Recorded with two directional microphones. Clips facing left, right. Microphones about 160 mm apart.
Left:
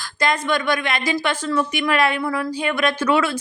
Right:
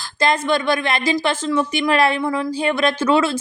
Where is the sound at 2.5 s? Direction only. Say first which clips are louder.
Right 2 dB; 30° right (ahead or behind).